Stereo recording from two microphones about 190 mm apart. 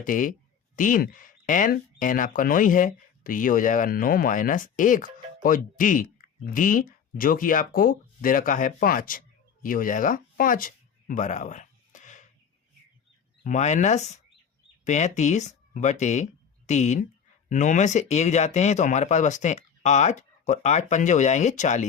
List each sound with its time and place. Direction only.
0.0 s speech: 45° left (ahead or behind)
9.6 s a sound: 45° left (ahead or behind)
13.4 s speech: 40° left (ahead or behind)